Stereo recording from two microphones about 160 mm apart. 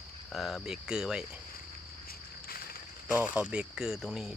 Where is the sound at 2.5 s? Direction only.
70° left (ahead or behind).